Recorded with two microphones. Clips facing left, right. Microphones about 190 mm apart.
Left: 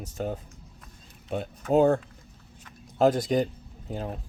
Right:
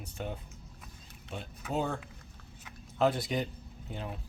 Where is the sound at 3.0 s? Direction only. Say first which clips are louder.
Left 7 dB; 45° left (ahead or behind).